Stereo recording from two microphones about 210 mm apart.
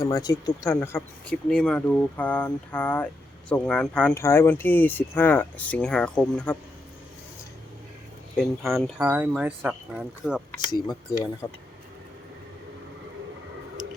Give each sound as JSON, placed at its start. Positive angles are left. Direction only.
{"t": 0.0, "sound": "speech", "side_deg": 15}
{"t": 8.4, "sound": "speech", "side_deg": 0}
{"t": 11.4, "sound": "speech", "side_deg": 15}